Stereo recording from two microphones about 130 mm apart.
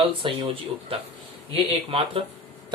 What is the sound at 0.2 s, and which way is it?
Speech, 40° right (ahead or behind).